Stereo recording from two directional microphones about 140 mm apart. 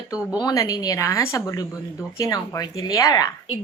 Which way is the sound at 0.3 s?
25° left (ahead or behind).